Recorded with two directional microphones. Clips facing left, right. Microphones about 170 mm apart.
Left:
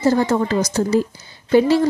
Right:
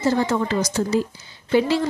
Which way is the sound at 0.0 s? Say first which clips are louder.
Left 4 dB; 45° left (ahead or behind).